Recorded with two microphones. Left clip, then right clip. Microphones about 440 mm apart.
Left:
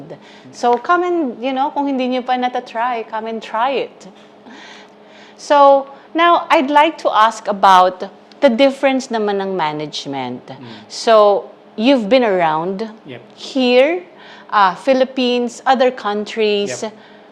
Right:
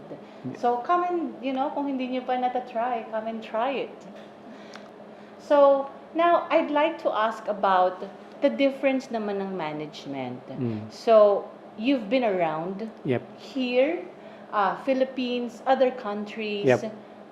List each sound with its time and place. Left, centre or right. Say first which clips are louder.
0.5 s speech: left 9 dB; left
5.5 s speech: left 9 dB; left